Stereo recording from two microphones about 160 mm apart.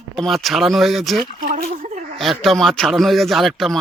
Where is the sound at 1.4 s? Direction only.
55° right (ahead or behind).